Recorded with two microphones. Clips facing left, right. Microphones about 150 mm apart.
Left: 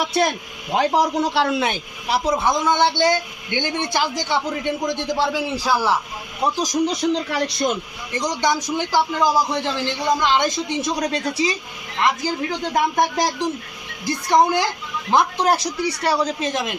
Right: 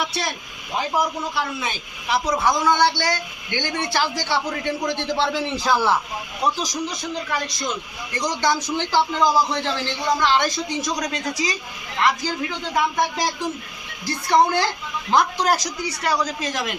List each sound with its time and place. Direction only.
0.7 s speech: 70° left (ahead or behind)
1.1 s speech: 80° left
2.0 s a woman's voice: 30° left (ahead or behind); by 6.0 s 10° left (ahead or behind)
6.8 s speech: 70° left (ahead or behind)
8.1 s a man's voice: 20° left (ahead or behind)
11.9 s a woman's voice: 20° left (ahead or behind)
12.5 s speech: 40° left (ahead or behind)
14.0 s a man's voice: 15° left (ahead or behind)